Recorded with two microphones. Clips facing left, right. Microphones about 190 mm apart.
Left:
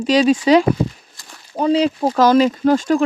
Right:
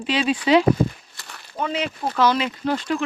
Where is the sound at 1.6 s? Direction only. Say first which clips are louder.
Left 10 dB; 35° left (ahead or behind).